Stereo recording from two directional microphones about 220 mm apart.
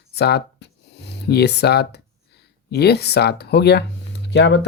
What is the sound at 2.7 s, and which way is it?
Speech, 50° left (ahead or behind).